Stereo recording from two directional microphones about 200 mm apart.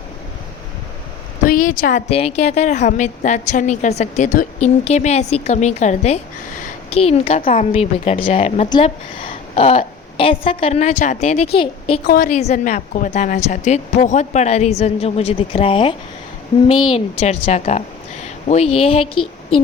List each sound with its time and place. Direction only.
1.5 s a woman's voice: 40° left (ahead or behind)
6.6 s a sound: 30° left (ahead or behind)
7.4 s a woman's voice: 35° left (ahead or behind)
12.0 s a woman's voice: 50° left (ahead or behind)
12.3 s a woman's voice: 35° left (ahead or behind)